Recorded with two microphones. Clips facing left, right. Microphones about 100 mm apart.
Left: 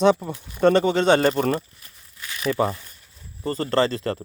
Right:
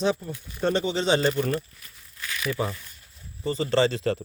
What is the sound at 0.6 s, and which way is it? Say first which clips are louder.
Speech: left 7 dB; 60° left (ahead or behind).